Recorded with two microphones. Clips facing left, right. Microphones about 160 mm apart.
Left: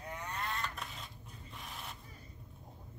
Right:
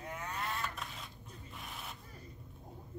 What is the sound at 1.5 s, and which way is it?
Rub, centre (ahead or behind).